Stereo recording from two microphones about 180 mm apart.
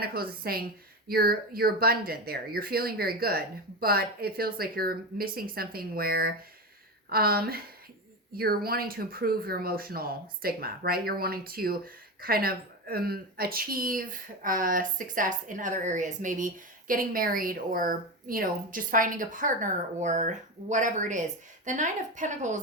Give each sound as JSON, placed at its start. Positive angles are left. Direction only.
{"t": 0.0, "sound": "a woman's voice", "side_deg": -55}